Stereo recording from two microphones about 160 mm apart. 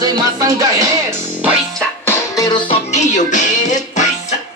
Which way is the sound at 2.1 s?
25° left (ahead or behind).